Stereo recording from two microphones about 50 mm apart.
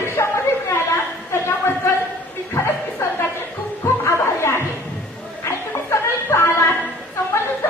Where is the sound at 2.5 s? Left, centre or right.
Left.